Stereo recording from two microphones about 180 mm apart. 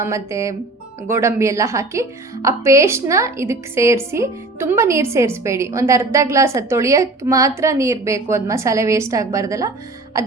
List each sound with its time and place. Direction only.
0.0 s a woman's voice: 15° right (ahead or behind)